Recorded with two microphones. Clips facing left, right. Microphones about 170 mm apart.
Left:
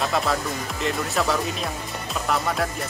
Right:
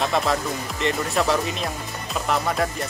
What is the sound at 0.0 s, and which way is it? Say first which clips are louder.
Speech: right 1 dB; centre (ahead or behind).